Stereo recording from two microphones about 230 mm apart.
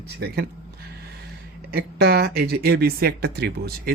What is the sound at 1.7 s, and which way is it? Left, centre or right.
Speech, right.